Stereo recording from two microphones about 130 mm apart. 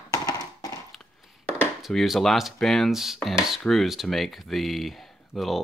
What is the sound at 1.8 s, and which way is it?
Speech, centre (ahead or behind).